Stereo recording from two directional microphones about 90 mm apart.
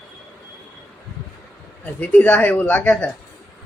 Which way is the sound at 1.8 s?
15° left (ahead or behind).